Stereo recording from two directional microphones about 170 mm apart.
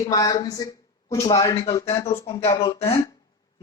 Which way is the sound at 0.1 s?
20° left (ahead or behind).